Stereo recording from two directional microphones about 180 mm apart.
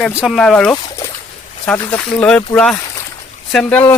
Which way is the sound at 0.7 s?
20° left (ahead or behind).